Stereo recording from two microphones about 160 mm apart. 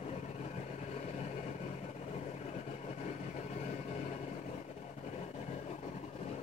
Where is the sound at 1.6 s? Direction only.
45° left (ahead or behind).